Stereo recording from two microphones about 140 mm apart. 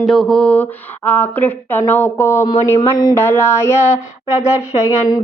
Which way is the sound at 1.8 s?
15° left (ahead or behind).